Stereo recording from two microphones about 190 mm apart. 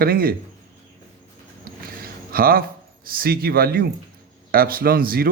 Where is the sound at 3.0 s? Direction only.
50° right (ahead or behind).